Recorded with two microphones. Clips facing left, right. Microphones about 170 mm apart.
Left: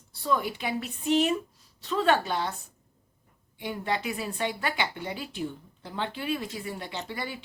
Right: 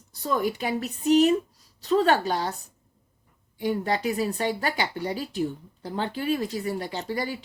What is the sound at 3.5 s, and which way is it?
A woman's voice, 40° right (ahead or behind).